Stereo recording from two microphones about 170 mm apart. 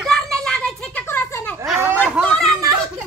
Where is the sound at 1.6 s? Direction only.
10° right (ahead or behind).